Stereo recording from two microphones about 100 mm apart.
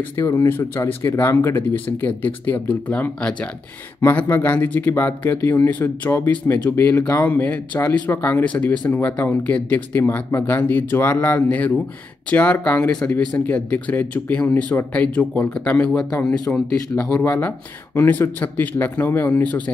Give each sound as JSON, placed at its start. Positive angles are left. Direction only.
{"t": 0.1, "sound": "speech", "side_deg": 25}